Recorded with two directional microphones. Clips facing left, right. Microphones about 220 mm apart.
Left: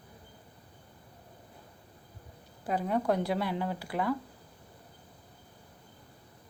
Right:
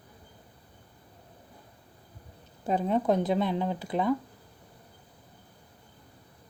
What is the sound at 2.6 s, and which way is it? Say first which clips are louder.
Speech: right 3 dB; 25° right (ahead or behind).